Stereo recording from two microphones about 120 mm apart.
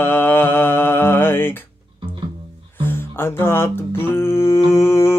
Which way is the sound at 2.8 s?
20° left (ahead or behind).